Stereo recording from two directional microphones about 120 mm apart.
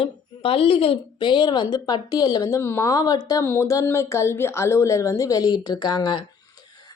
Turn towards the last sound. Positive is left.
turn(degrees=40)  # may be behind; listen again after turning